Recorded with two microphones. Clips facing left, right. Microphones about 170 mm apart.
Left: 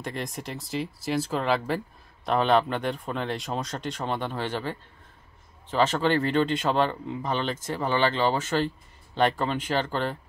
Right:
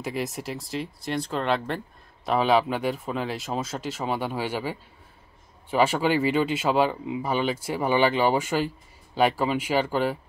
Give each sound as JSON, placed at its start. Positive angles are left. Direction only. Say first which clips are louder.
{"t": 0.0, "sound": "speech", "louder": "right 3 dB", "side_deg": -5}